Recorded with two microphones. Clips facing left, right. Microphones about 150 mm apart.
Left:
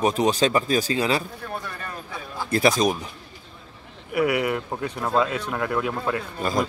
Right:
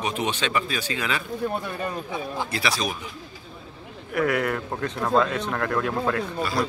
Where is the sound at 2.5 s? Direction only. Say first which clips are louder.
Left 10 dB; 45° left (ahead or behind).